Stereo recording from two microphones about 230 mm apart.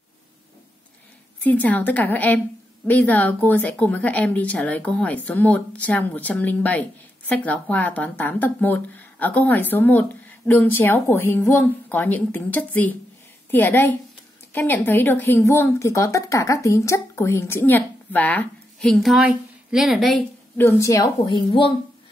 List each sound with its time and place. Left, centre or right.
1.4 s a woman's voice: centre
20.6 s speech: centre